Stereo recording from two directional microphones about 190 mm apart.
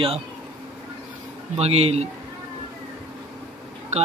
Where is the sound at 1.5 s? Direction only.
35° right (ahead or behind).